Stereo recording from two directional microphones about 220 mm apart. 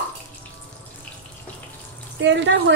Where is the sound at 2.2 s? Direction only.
55° right (ahead or behind).